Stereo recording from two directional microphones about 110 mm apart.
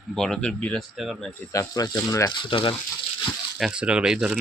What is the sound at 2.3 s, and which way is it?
Speech, 50° left (ahead or behind).